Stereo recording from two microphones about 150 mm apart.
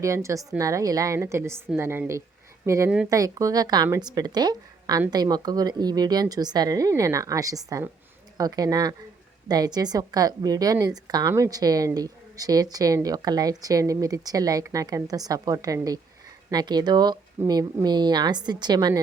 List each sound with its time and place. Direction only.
0.0 s a woman's voice: 20° right (ahead or behind)